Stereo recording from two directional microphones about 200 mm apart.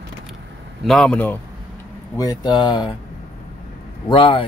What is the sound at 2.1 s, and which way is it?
Speech, 20° left (ahead or behind).